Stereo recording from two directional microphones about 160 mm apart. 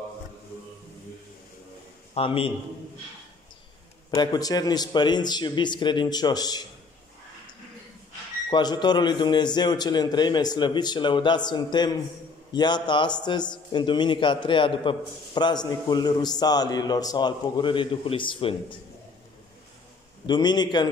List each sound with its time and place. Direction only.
2.1 s a man's voice: 35° left (ahead or behind)
4.1 s a man's voice: 25° left (ahead or behind)
8.5 s a man's voice: 30° left (ahead or behind)
20.2 s a man's voice: 25° left (ahead or behind)